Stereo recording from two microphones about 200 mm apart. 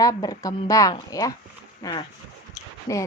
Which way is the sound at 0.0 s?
15° left (ahead or behind).